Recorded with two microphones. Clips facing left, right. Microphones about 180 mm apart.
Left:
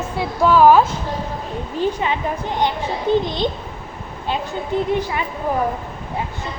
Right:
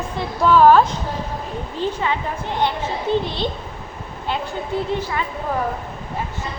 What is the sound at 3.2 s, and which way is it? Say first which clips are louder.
Speech: left 3 dB; 15° left (ahead or behind).